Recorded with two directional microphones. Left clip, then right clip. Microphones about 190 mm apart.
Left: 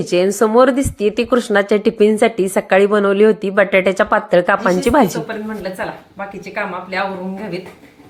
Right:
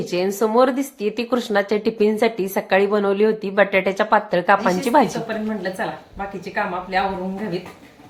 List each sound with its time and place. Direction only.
0.0 s speech: 30° left (ahead or behind)